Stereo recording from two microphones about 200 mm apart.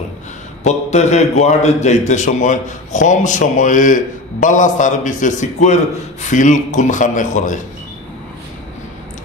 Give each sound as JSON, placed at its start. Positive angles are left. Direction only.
{"t": 0.7, "sound": "a man's voice", "side_deg": 35}